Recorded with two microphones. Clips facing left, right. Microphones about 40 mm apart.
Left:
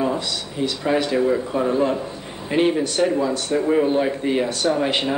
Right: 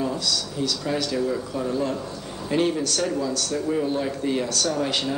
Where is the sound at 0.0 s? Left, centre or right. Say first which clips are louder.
Left 3 dB; left.